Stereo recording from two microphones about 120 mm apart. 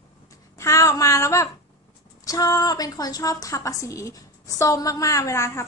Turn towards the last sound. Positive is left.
turn(degrees=25)  # may be behind; listen again after turning